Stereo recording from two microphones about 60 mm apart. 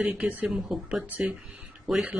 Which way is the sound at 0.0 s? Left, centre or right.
Right.